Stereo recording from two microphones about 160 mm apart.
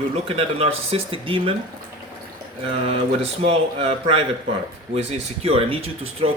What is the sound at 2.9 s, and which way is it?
A man's voice, 40° right (ahead or behind).